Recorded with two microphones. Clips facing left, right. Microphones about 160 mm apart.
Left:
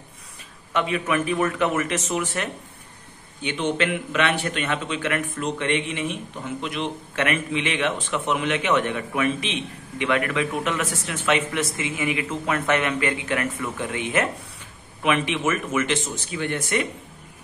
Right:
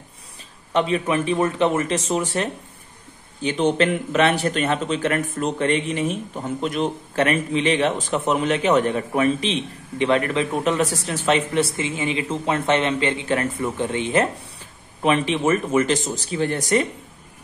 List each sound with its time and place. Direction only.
0.7 s a man's voice: 30° right (ahead or behind)